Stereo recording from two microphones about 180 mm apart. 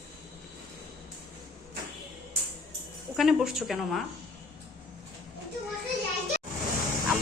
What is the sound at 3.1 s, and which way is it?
Speech, centre (ahead or behind).